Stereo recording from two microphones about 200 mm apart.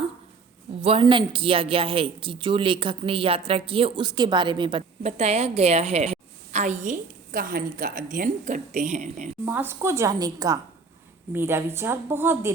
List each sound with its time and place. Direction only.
0.8 s speech: 30° right (ahead or behind)
9.5 s a woman's voice: 10° right (ahead or behind)